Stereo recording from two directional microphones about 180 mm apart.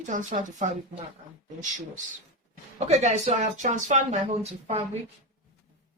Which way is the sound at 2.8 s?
35° right (ahead or behind).